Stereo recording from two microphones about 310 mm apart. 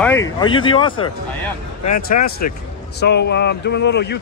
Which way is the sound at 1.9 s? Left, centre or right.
Left.